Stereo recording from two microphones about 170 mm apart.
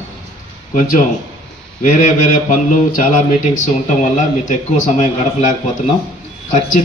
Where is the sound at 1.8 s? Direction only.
50° left (ahead or behind).